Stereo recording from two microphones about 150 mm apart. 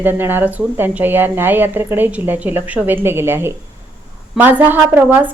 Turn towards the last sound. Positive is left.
turn(degrees=-10)  # may be behind; listen again after turning